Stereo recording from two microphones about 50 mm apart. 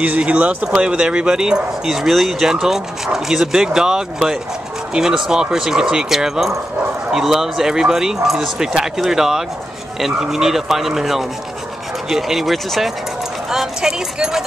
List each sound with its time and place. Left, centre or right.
0.0 s speech: right
0.7 s speech: centre
1.9 s speech: centre